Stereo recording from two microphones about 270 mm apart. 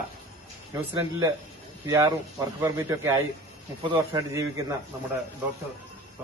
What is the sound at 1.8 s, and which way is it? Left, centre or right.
A man's voice, centre.